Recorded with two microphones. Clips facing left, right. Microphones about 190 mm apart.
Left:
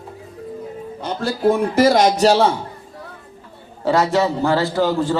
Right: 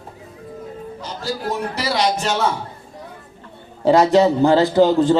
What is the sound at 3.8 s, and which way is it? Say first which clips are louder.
A man's voice: right 4 dB; 20° right (ahead or behind).